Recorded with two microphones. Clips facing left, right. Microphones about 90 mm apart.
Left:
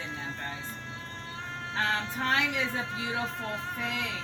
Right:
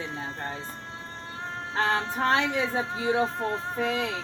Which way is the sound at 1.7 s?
30° right (ahead or behind).